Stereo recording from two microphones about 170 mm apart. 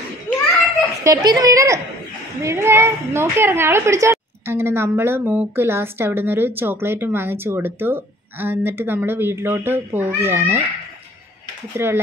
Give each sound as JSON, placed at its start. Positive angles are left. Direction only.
{"t": 1.0, "sound": "a child's voice", "side_deg": -20}
{"t": 11.7, "sound": "a woman's voice", "side_deg": -15}